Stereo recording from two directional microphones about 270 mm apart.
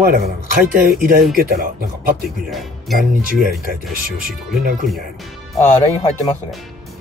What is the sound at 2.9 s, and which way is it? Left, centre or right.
Speech, right.